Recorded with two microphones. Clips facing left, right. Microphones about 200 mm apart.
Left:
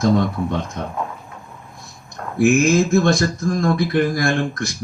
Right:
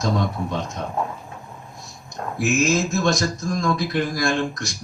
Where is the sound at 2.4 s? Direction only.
55° left (ahead or behind).